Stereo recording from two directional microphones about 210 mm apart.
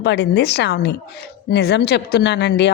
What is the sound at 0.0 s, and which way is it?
A man's voice, 55° left (ahead or behind).